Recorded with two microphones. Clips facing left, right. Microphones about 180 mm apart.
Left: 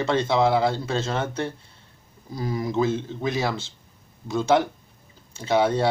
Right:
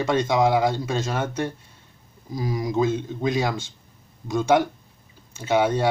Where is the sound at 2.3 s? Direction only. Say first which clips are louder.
Right 1 dB; 15° right (ahead or behind).